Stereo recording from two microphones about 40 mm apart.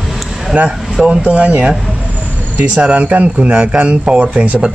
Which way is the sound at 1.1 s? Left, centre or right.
Right.